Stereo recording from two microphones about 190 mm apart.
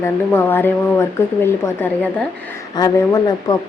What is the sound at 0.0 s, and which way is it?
A woman's voice, 10° left (ahead or behind).